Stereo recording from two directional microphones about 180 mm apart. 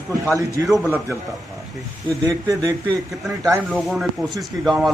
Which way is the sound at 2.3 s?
20° right (ahead or behind).